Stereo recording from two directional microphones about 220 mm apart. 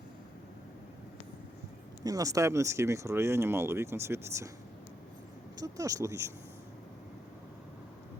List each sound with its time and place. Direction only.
2.0 s speech: 15° right (ahead or behind)
5.5 s speech: 15° right (ahead or behind)